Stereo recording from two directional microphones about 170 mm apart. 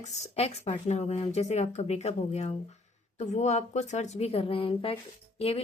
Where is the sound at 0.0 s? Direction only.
40° left (ahead or behind).